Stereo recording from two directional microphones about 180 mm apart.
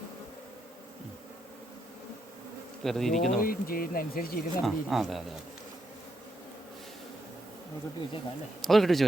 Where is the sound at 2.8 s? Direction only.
Centre (ahead or behind).